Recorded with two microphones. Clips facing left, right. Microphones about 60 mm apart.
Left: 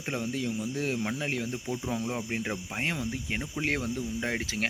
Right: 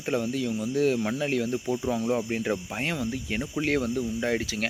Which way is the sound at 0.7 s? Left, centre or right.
Left.